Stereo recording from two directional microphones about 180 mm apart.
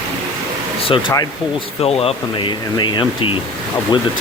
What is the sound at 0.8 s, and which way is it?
Speech, 25° left (ahead or behind).